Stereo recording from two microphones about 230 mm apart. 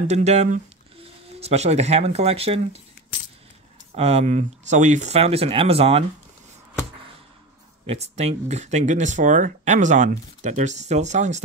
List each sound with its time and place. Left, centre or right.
0.1 s speech: right
3.9 s speech: right
7.8 s speech: right